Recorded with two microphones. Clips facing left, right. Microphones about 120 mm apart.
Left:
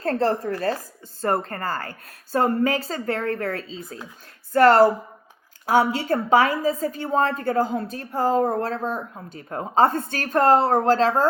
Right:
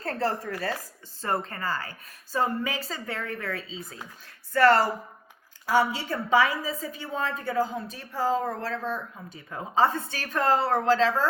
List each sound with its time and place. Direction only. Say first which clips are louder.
0.0 s a woman's voice: left 7 dB; 40° left (ahead or behind)
1.2 s speech: left 5 dB; 50° left (ahead or behind)
4.5 s speech: left 6 dB; 50° left (ahead or behind)